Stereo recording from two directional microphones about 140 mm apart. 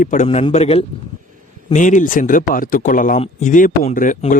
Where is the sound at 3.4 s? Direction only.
65° left (ahead or behind).